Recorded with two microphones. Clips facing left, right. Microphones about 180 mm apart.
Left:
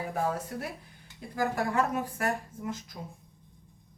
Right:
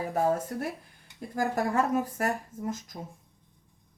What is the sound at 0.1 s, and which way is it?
Speech, 45° right (ahead or behind).